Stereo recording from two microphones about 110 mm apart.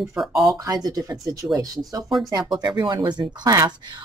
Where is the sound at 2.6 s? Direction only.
40° right (ahead or behind).